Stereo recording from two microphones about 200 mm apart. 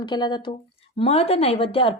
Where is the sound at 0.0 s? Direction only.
20° left (ahead or behind).